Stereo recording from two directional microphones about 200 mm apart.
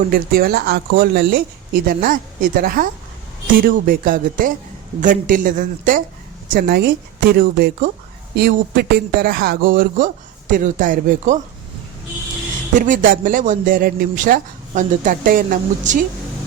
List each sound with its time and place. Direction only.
0.1 s speech: 50° right (ahead or behind)
12.7 s speech: 40° right (ahead or behind)